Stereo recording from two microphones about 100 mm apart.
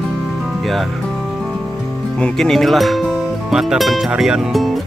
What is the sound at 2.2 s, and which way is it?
Speech, 5° left (ahead or behind).